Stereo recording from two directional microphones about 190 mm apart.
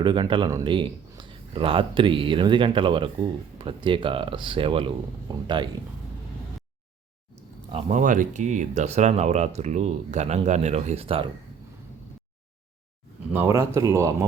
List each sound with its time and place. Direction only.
0.0 s a man's voice: 25° right (ahead or behind)
7.7 s speech: 35° right (ahead or behind)
13.3 s speech: 10° right (ahead or behind)